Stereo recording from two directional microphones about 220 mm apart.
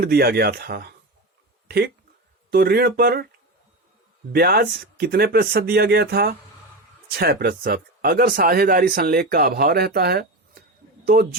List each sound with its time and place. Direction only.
0.0 s speech: 45° right (ahead or behind)
4.3 s a man's voice: 45° right (ahead or behind)